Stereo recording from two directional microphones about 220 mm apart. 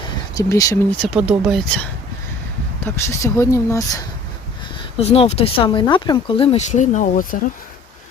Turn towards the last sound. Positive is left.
turn(degrees=35)  # may be behind; listen again after turning